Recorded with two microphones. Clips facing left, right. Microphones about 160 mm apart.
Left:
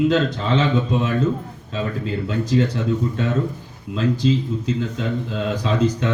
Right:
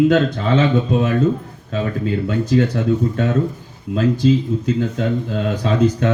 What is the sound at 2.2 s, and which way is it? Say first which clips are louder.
Speech: right 2 dB; 55° right (ahead or behind).